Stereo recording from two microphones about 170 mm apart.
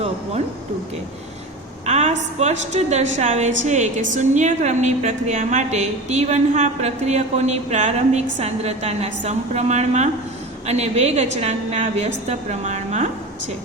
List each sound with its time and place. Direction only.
1.9 s a woman's voice: 40° right (ahead or behind)